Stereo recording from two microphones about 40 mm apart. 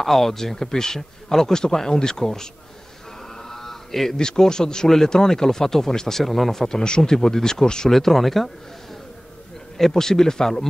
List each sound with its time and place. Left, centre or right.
0.0 s speech: centre
3.3 s a sound: centre
4.2 s speech: centre
7.9 s speech: centre
9.8 s speech: centre